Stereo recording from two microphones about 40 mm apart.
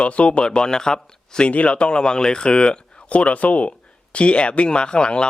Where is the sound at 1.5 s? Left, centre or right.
Left.